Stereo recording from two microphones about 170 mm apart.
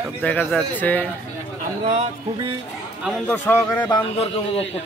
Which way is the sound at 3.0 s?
5° left (ahead or behind).